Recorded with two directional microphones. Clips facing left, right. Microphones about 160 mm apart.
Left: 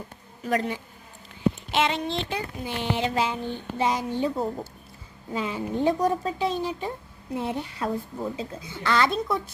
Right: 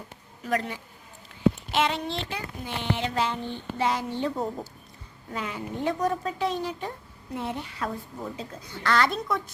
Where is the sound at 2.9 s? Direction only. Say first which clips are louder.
Left 1 dB; 10° left (ahead or behind).